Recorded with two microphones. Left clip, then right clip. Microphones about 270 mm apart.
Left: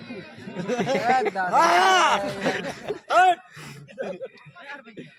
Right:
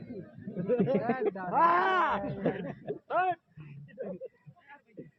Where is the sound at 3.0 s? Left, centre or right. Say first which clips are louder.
Left 12 dB; left.